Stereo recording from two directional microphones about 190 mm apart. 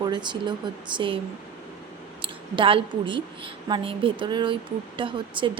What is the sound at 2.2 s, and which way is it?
Speech, 25° right (ahead or behind).